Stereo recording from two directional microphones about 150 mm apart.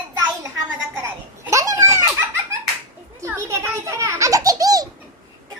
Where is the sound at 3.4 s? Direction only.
20° right (ahead or behind).